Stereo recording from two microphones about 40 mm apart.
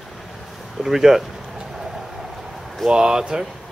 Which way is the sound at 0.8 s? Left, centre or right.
Centre.